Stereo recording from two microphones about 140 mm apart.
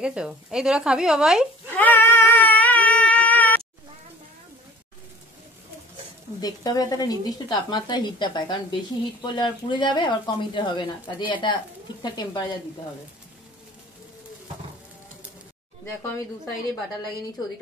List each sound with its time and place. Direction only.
0.0 s speech: 5° right (ahead or behind)
1.8 s baby cry: 15° left (ahead or behind)
6.4 s speech: 25° left (ahead or behind)
15.8 s speech: 20° left (ahead or behind)